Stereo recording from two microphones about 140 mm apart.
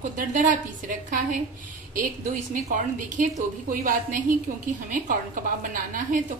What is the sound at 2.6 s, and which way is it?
Speech, 65° right (ahead or behind).